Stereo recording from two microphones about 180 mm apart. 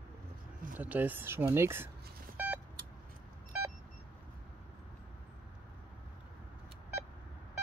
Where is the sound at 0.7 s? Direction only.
10° right (ahead or behind).